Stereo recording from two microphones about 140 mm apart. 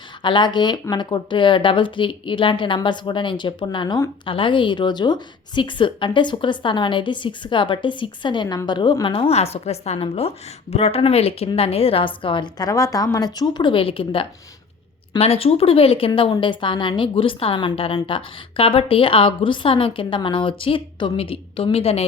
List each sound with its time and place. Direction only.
0.2 s a woman's voice: 35° left (ahead or behind)